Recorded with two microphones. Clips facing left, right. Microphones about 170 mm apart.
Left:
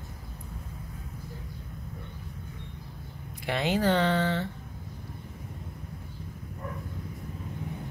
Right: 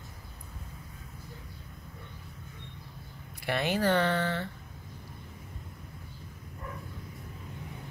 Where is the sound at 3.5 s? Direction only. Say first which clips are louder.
Left 2 dB; 15° left (ahead or behind).